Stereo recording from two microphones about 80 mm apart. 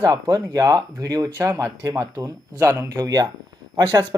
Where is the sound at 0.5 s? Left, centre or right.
Right.